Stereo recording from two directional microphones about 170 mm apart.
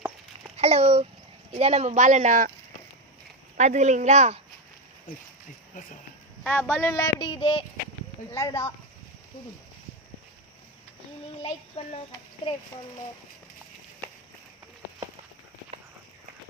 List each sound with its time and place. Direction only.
0.5 s speech: 40° right (ahead or behind)
3.6 s speech: 45° right (ahead or behind)
6.4 s speech: 10° left (ahead or behind)